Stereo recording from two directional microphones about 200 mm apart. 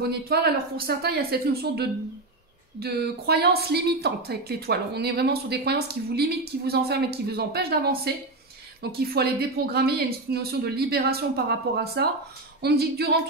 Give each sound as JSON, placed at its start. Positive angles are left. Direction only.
{"t": 0.0, "sound": "a woman's voice", "side_deg": -50}